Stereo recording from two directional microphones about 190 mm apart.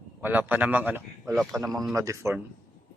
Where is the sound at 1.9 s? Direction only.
15° right (ahead or behind).